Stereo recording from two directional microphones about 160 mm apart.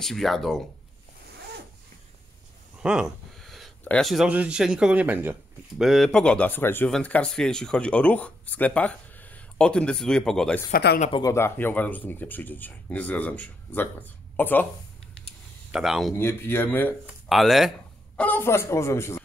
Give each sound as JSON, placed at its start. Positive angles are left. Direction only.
{"t": 0.0, "sound": "speech", "side_deg": 0}
{"t": 2.8, "sound": "a sound", "side_deg": -5}
{"t": 3.8, "sound": "speech", "side_deg": 5}
{"t": 10.7, "sound": "speech", "side_deg": 90}
{"t": 11.1, "sound": "speech", "side_deg": 25}
{"t": 11.3, "sound": "speech", "side_deg": 15}
{"t": 15.7, "sound": "speech", "side_deg": -5}
{"t": 16.2, "sound": "speech", "side_deg": 15}
{"t": 17.0, "sound": "a sound", "side_deg": 0}
{"t": 18.2, "sound": "speech", "side_deg": 15}